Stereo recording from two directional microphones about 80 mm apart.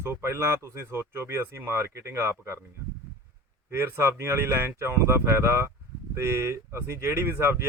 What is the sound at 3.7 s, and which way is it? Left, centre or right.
Speech, right.